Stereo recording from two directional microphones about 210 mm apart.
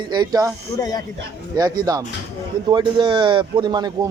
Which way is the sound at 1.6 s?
15° right (ahead or behind).